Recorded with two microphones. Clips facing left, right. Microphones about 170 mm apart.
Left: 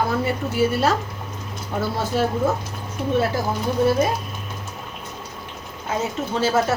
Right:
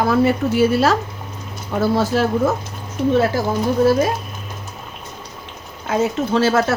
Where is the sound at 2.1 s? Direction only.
90° right.